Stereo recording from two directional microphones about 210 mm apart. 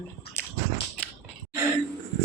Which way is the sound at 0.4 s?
10° left (ahead or behind).